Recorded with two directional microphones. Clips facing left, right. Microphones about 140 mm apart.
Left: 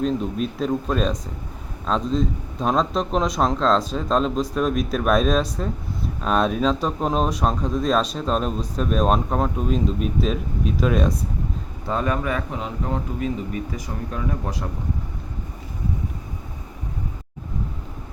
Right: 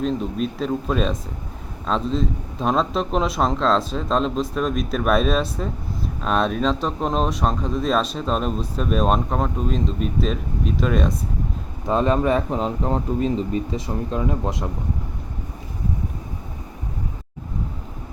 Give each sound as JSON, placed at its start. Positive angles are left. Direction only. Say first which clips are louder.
{"t": 0.0, "sound": "speech", "louder": "even", "side_deg": 0}
{"t": 11.9, "sound": "speech", "louder": "right 5 dB", "side_deg": -25}